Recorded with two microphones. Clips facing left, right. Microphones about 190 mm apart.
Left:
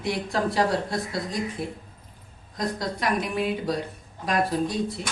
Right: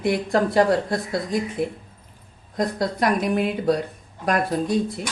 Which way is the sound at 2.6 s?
50° right (ahead or behind).